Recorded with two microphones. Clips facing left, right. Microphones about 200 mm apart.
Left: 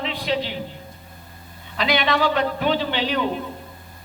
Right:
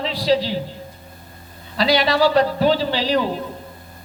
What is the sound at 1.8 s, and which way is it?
A man's voice, 35° right (ahead or behind).